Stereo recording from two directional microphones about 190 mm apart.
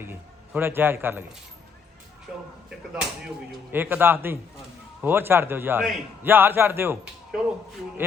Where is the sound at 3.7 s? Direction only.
10° right (ahead or behind).